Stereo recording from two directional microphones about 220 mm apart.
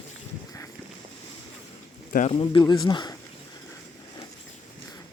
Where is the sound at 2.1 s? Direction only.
35° left (ahead or behind).